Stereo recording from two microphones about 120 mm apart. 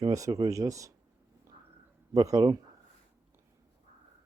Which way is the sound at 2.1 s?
30° right (ahead or behind).